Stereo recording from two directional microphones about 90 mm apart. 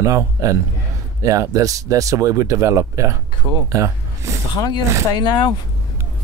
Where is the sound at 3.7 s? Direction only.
35° right (ahead or behind).